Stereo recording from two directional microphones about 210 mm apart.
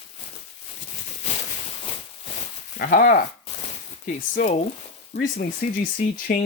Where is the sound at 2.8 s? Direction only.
40° left (ahead or behind).